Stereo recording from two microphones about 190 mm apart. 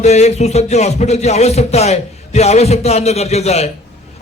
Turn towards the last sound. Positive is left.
turn(degrees=35)  # may be behind; listen again after turning